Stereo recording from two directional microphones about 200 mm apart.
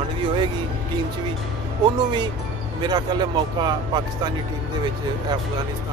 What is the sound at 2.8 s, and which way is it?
Speech, 20° right (ahead or behind).